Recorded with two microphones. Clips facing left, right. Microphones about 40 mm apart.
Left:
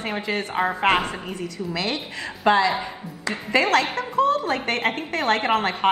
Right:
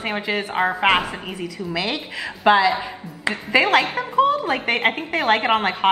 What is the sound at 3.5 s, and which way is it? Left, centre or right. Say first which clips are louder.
A woman's voice: right 2 dB; centre.